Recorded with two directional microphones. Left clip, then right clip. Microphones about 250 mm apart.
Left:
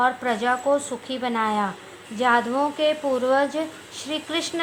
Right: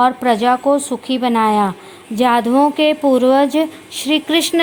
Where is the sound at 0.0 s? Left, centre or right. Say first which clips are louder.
Right 8 dB; right.